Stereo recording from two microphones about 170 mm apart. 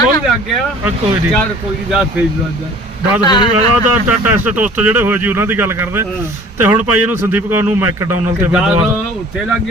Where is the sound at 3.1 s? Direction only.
25° left (ahead or behind).